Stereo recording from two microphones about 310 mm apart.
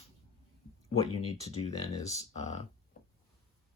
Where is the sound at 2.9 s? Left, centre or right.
Left.